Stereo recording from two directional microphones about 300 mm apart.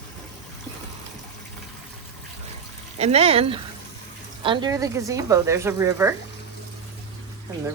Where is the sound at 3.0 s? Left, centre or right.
Centre.